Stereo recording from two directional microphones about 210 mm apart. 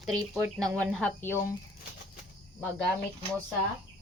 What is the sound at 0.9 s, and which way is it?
Speech, centre (ahead or behind).